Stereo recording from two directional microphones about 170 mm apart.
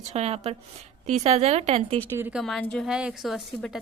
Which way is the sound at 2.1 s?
10° right (ahead or behind).